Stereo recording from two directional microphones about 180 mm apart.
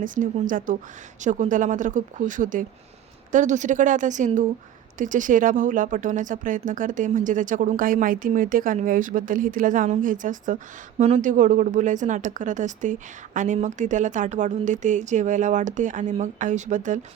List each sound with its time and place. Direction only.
0.0 s speech: 45° right (ahead or behind)